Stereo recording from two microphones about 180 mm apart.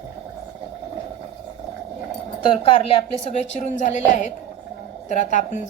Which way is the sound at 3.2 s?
40° left (ahead or behind).